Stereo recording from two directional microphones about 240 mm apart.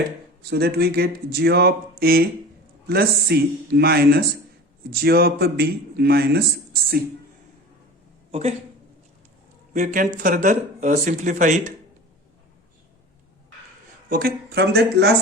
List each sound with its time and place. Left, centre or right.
0.5 s speech: right
8.3 s a woman's voice: right
9.7 s speech: right
14.1 s speech: right